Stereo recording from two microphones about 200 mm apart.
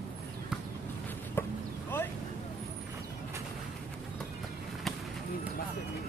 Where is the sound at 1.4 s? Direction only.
10° left (ahead or behind).